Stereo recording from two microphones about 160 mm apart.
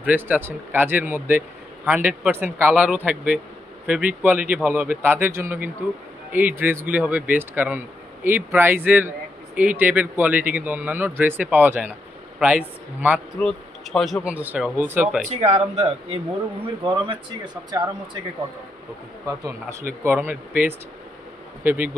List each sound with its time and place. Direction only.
0.0 s speech: 10° right (ahead or behind)
13.4 s speech: 5° left (ahead or behind)
15.2 s speech: 45° right (ahead or behind)
16.8 s speech: 30° right (ahead or behind)
19.2 s speech: 20° right (ahead or behind)